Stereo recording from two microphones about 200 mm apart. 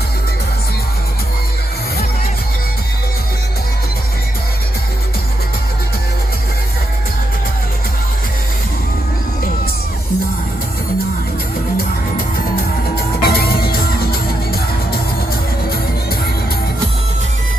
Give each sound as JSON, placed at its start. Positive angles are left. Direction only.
{"t": 13.2, "sound": "music", "side_deg": 50}